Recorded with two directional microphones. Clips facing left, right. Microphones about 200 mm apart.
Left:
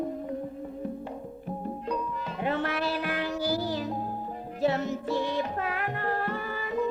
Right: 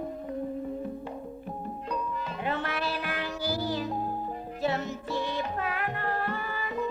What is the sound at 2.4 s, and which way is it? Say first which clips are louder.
Music: left 4 dB; 45° left (ahead or behind).